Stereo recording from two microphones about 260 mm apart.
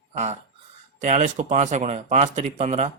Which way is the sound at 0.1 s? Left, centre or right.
Right.